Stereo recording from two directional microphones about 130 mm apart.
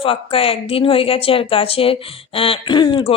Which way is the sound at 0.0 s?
45° left (ahead or behind).